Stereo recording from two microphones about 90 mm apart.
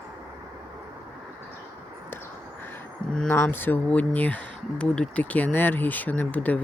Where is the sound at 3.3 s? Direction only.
25° left (ahead or behind).